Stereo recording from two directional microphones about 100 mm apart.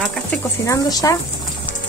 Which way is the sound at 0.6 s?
35° left (ahead or behind).